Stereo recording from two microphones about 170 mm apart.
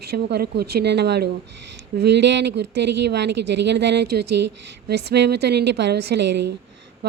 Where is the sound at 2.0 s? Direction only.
90° right.